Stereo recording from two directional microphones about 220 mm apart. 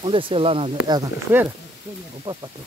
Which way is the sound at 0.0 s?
25° right (ahead or behind).